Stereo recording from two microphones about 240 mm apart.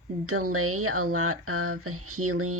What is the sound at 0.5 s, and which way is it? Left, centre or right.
Speech, right.